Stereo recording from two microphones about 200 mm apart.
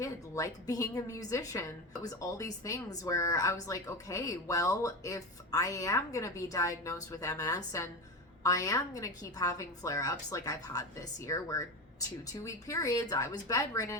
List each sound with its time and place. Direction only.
0.0 s a woman's voice: 15° left (ahead or behind)